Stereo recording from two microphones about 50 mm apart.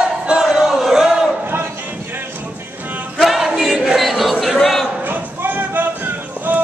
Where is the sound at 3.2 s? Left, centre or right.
Centre.